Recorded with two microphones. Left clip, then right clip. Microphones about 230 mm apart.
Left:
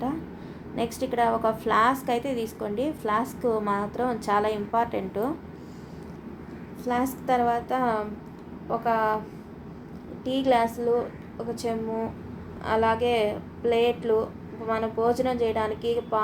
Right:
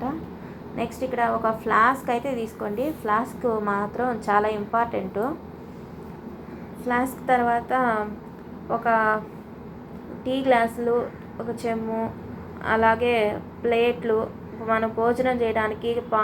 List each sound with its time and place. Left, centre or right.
0.8 s a woman's voice: centre
6.8 s a woman's voice: centre
10.2 s a woman's voice: centre